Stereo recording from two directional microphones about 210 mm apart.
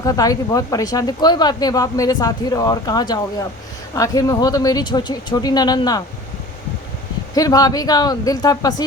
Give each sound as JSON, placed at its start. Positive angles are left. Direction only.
{"t": 0.0, "sound": "speech", "side_deg": 15}
{"t": 7.3, "sound": "speech", "side_deg": 15}